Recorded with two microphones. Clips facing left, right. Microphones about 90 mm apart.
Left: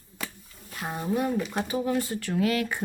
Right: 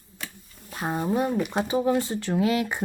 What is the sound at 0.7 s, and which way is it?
Speech, 30° right (ahead or behind).